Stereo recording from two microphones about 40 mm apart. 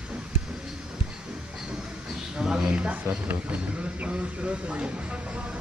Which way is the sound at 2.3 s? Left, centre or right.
Centre.